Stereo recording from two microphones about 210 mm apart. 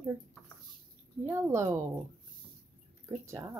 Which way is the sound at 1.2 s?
10° right (ahead or behind).